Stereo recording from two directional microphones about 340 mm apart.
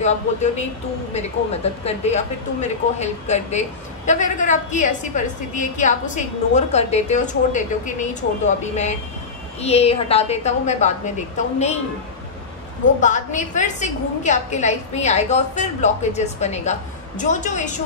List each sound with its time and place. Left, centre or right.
0.0 s a woman's voice: centre
13.0 s a woman's voice: left